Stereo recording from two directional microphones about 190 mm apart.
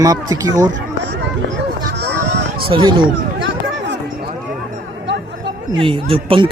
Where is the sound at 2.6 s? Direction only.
25° right (ahead or behind).